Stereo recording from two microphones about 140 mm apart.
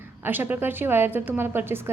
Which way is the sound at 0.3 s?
15° right (ahead or behind).